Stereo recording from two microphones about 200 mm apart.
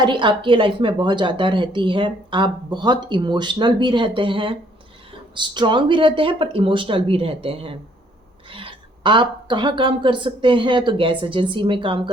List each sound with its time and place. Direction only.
0.0 s a woman's voice: 25° right (ahead or behind)